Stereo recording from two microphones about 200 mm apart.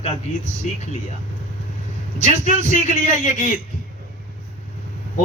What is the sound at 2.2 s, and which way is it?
Speech, 40° left (ahead or behind).